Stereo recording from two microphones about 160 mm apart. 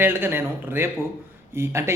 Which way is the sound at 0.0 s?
15° right (ahead or behind).